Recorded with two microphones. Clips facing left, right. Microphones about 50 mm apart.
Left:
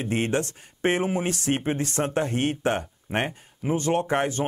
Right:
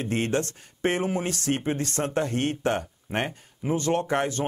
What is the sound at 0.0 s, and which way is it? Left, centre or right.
Speech, centre.